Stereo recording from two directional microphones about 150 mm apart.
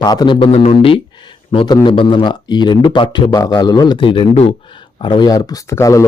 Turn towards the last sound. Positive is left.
turn(degrees=20)  # may be behind; listen again after turning